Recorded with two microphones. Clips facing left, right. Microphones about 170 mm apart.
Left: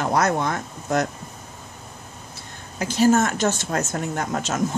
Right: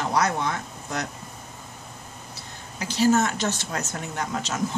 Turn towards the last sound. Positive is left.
turn(degrees=50)  # may be behind; listen again after turning